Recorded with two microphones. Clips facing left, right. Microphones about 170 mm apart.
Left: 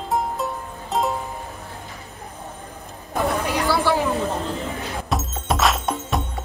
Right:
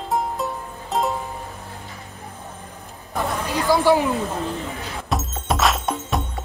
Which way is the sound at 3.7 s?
15° right (ahead or behind).